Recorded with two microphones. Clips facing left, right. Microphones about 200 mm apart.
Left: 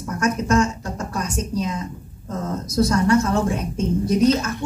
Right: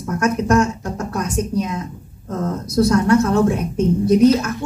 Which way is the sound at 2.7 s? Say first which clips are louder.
Right 3 dB; 60° right (ahead or behind).